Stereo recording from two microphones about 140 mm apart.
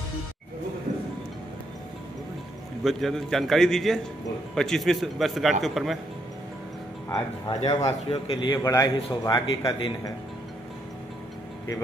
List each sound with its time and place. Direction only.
2.8 s a man's voice: centre (ahead or behind)
7.1 s a man's voice: 25° left (ahead or behind)